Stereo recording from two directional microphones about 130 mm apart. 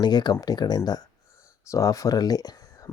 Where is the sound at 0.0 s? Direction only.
35° left (ahead or behind).